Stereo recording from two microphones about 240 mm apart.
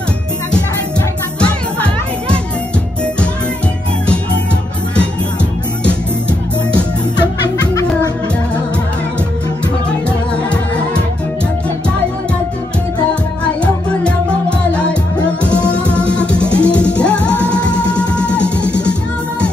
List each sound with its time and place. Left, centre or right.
1.4 s music: centre
7.2 s music: centre
14.0 s music: centre